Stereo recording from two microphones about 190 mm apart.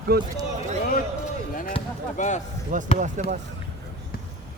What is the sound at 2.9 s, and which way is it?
Speech, 45° right (ahead or behind).